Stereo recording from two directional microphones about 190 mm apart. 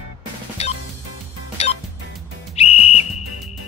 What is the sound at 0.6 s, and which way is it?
Music, 35° left (ahead or behind).